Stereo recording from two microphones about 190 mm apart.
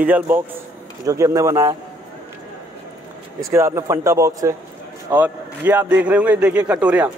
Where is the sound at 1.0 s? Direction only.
15° right (ahead or behind).